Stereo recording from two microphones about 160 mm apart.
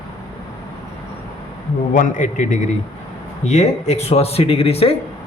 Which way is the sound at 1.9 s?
55° left (ahead or behind).